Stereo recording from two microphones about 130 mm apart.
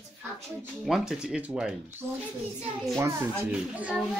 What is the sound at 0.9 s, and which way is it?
Speech, 5° right (ahead or behind).